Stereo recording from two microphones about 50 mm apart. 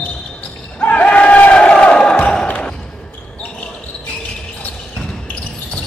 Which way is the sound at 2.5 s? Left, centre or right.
Left.